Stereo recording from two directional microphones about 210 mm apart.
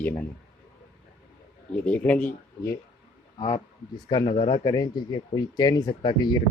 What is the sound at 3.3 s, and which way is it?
A man's voice, 20° left (ahead or behind).